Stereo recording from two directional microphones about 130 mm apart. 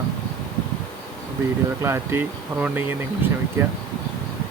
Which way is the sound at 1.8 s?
20° right (ahead or behind).